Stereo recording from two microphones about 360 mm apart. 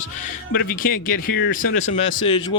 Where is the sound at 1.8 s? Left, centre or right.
Centre.